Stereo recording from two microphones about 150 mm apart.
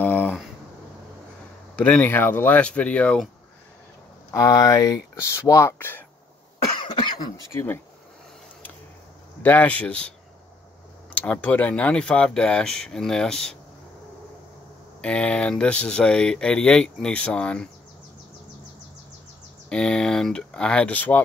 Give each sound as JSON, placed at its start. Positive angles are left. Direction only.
{"t": 0.0, "sound": "a sound", "side_deg": 10}
{"t": 1.8, "sound": "speech", "side_deg": 10}
{"t": 4.3, "sound": "speech", "side_deg": 25}
{"t": 6.8, "sound": "speech", "side_deg": 30}
{"t": 9.4, "sound": "speech", "side_deg": 10}
{"t": 11.1, "sound": "speech", "side_deg": 10}
{"t": 15.0, "sound": "speech", "side_deg": 10}
{"t": 19.7, "sound": "speech", "side_deg": 5}